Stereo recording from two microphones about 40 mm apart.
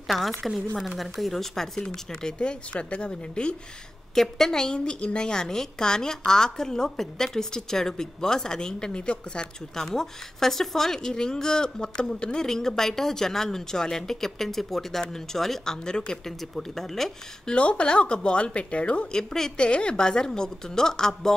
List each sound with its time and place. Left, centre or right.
0.1 s a woman's voice: centre; by 3.5 s left
4.1 s a woman's voice: centre
4.7 s a woman's voice: left
9.8 s a woman's voice: centre
12.4 s a woman's voice: centre
16.3 s a woman's voice: centre
17.6 s speech: left
19.1 s a woman's voice: centre
19.5 s a woman's voice: left